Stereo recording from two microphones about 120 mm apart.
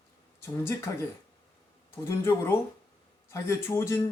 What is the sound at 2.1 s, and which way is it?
Speech, 25° left (ahead or behind).